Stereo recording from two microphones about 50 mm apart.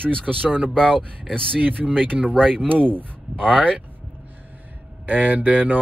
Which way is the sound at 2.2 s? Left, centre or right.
Centre.